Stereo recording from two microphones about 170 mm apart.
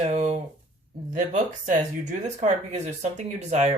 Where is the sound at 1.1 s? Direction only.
45° right (ahead or behind).